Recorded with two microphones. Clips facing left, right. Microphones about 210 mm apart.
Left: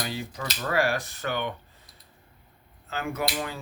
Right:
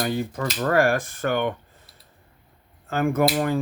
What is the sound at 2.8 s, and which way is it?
Speech, 50° right (ahead or behind).